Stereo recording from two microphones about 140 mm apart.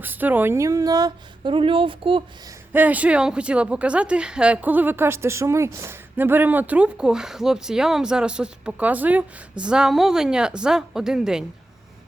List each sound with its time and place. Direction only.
0.0 s speech: 15° right (ahead or behind); by 2.2 s 40° right (ahead or behind)
2.7 s a woman's voice: 10° right (ahead or behind)